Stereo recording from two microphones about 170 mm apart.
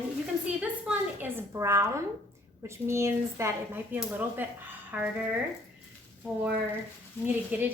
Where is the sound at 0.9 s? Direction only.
15° right (ahead or behind).